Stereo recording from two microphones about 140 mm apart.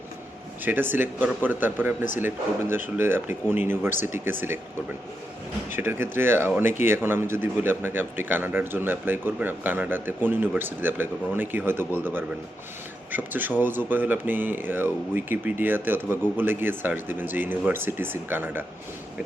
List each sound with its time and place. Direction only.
0.6 s speech: 15° right (ahead or behind)
5.7 s speech: 15° right (ahead or behind)